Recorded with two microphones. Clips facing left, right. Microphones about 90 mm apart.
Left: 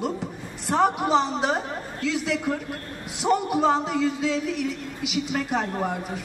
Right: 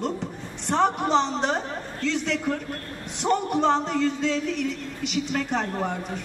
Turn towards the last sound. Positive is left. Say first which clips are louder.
# left 1 dB
turn(degrees=5)  # may be behind; listen again after turning